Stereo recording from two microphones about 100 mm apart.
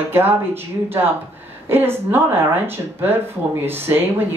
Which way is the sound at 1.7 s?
20° right (ahead or behind).